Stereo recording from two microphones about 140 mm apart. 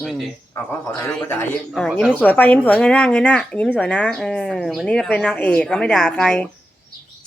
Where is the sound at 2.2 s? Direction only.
10° left (ahead or behind).